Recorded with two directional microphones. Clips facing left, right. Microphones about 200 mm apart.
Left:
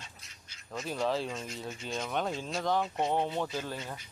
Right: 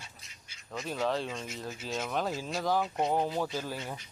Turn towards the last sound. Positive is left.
turn(degrees=-10)  # may be behind; listen again after turning